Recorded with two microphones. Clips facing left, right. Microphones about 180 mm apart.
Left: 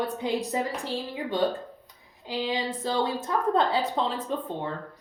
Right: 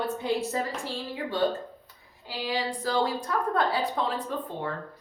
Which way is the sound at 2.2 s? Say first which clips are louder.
Left 2 dB; 20° left (ahead or behind).